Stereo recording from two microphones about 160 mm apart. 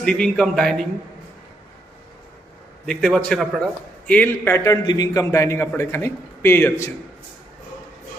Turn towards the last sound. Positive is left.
turn(degrees=15)  # may be behind; listen again after turning